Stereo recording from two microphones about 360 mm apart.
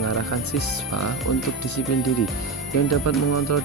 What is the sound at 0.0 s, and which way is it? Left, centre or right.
Speech, left.